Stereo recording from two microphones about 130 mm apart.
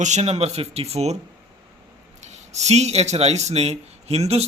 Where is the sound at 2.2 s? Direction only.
60° right (ahead or behind).